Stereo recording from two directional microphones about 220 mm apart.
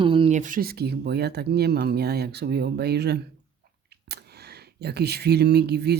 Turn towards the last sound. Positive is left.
turn(degrees=-50)  # may be behind; listen again after turning